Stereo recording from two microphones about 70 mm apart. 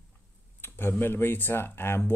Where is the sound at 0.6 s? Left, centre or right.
Left.